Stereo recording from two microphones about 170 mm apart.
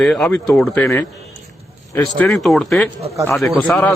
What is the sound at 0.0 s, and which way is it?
Speech, 5° left (ahead or behind).